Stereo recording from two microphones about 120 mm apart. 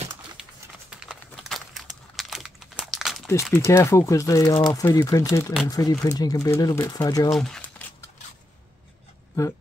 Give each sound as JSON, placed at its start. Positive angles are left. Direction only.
{"t": 0.4, "sound": "a sound", "side_deg": -5}
{"t": 3.0, "sound": "crumpling", "side_deg": 0}
{"t": 3.5, "sound": "speech", "side_deg": 25}
{"t": 7.2, "sound": "speech", "side_deg": 5}